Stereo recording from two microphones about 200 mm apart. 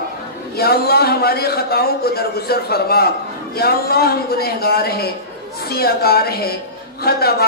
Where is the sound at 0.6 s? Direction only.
50° left (ahead or behind).